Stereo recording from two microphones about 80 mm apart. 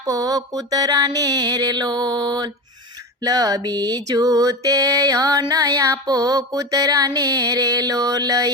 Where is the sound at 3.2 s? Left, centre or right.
Right.